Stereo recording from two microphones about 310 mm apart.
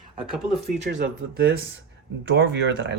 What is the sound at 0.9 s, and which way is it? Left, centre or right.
Speech, right.